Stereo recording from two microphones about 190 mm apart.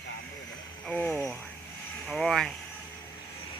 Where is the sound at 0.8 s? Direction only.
5° left (ahead or behind).